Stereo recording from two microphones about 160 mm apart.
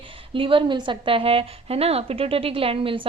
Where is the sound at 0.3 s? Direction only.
35° right (ahead or behind).